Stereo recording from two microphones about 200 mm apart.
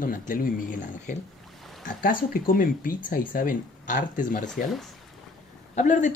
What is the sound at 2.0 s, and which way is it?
Speech, 45° left (ahead or behind).